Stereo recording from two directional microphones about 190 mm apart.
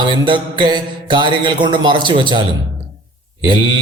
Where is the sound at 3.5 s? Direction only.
25° right (ahead or behind).